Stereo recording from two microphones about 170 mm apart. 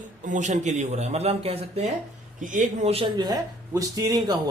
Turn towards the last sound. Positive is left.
turn(degrees=-20)  # may be behind; listen again after turning